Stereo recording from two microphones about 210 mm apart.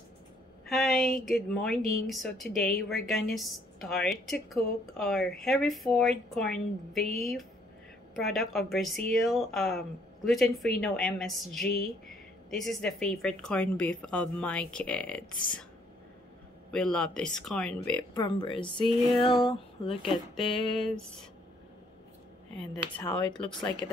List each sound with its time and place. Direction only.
0.7 s speech: centre (ahead or behind)
16.7 s speech: 5° left (ahead or behind)
18.1 s speech: 20° left (ahead or behind)
19.9 s speech: centre (ahead or behind)
23.8 s speech: 10° left (ahead or behind)